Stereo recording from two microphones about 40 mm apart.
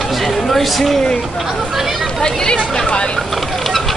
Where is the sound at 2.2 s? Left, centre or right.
Centre.